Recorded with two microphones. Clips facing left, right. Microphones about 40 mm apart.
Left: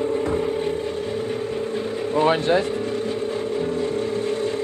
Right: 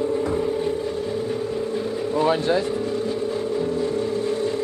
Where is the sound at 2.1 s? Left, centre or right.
Left.